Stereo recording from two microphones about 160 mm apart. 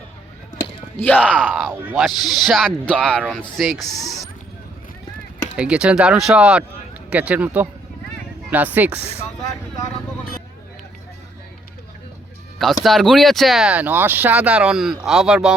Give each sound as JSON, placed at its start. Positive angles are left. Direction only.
{"t": 0.9, "sound": "speech", "side_deg": 10}
{"t": 1.7, "sound": "speech", "side_deg": -10}
{"t": 2.0, "sound": "speech", "side_deg": 0}
{"t": 5.5, "sound": "speech", "side_deg": -5}
{"t": 9.1, "sound": "vehicle", "side_deg": 25}
{"t": 12.5, "sound": "speech", "side_deg": 0}